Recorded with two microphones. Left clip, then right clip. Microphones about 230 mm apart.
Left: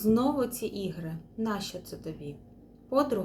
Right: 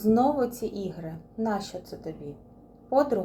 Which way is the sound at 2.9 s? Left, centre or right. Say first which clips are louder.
Right 4 dB; centre.